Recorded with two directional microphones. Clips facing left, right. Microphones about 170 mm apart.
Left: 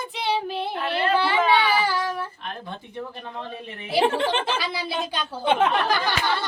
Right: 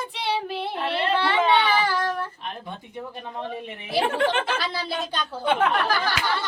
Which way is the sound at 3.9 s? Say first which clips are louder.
Left 1 dB; 25° left (ahead or behind).